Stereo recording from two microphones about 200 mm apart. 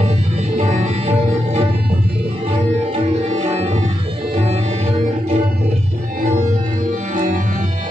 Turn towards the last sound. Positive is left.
turn(degrees=-40)  # may be behind; listen again after turning